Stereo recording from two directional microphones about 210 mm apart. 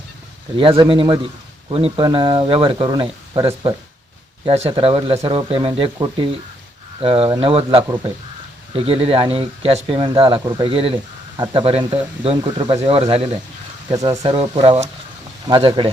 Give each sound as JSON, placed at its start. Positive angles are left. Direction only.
{"t": 0.5, "sound": "speech", "side_deg": -25}
{"t": 13.9, "sound": "speech", "side_deg": -15}